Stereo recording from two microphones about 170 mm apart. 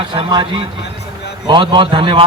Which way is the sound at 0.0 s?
25° right (ahead or behind).